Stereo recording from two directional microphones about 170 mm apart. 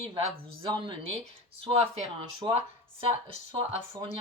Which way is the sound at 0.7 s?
25° right (ahead or behind).